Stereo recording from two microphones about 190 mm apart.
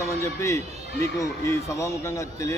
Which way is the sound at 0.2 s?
15° left (ahead or behind).